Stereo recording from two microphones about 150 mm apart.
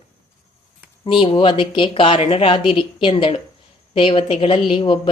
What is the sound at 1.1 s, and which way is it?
Speech, 35° left (ahead or behind).